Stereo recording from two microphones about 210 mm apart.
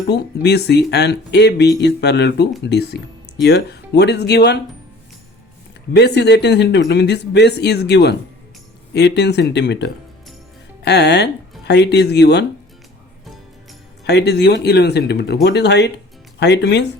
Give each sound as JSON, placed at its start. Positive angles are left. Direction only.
{"t": 0.1, "sound": "speech", "side_deg": 50}
{"t": 6.0, "sound": "speech", "side_deg": 55}
{"t": 14.0, "sound": "speech", "side_deg": 50}